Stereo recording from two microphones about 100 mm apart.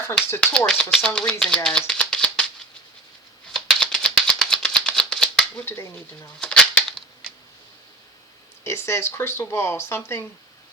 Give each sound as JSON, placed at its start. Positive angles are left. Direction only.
{"t": 0.3, "sound": "speech", "side_deg": 10}
{"t": 3.5, "sound": "rattle", "side_deg": 10}
{"t": 5.6, "sound": "speech", "side_deg": 25}
{"t": 6.4, "sound": "a sound", "side_deg": 10}
{"t": 7.2, "sound": "tick", "side_deg": -5}
{"t": 8.6, "sound": "speech", "side_deg": 25}